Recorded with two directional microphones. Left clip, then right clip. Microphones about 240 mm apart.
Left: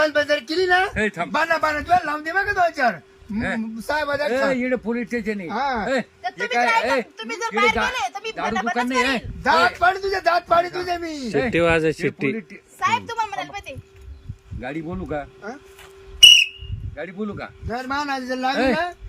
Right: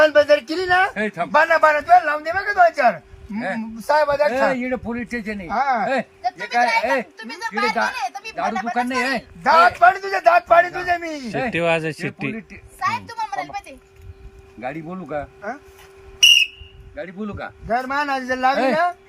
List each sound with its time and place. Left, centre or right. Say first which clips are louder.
0.0 s a sound: right 6 dB; centre
0.7 s a man's voice: right 3 dB; centre
0.9 s speech: even; centre
1.3 s a man's voice: right 8 dB; centre
5.5 s a man's voice: right 5 dB; centre
7.4 s a child's voice: left 1 dB; centre
8.7 s a man's voice: left 2 dB; centre
11.3 s speech: left 1 dB; centre
12.8 s a child's voice: left 2 dB; centre
14.6 s speech: right 1 dB; centre
16.2 s whistle: left 3 dB; centre
16.9 s speech: even; centre
17.7 s a man's voice: right 4 dB; centre